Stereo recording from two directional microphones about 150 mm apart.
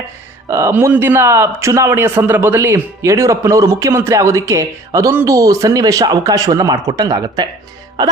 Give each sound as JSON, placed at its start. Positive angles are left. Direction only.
{"t": 0.5, "sound": "a man's voice", "side_deg": -15}
{"t": 8.0, "sound": "music", "side_deg": -25}